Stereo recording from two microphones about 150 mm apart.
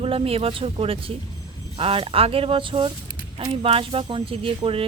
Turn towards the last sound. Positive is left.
turn(degrees=-40)  # may be behind; listen again after turning